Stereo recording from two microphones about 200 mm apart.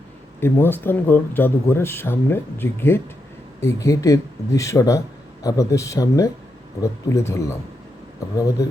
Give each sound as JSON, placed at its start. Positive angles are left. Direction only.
{"t": 0.3, "sound": "speech", "side_deg": 10}